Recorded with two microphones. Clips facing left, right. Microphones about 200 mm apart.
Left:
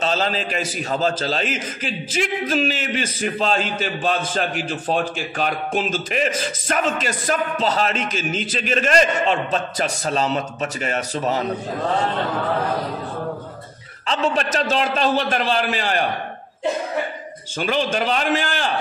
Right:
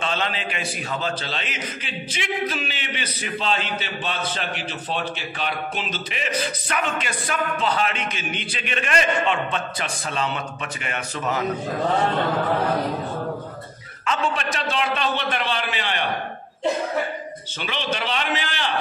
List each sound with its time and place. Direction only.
0.0 s a man's voice: 35° left (ahead or behind)
14.0 s a man's voice: 35° left (ahead or behind)
17.6 s a man's voice: 45° left (ahead or behind)